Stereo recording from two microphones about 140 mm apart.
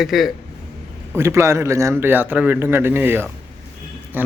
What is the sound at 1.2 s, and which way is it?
A man's voice, 20° right (ahead or behind).